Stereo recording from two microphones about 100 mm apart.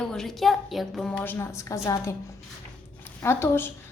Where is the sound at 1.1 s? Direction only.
20° left (ahead or behind).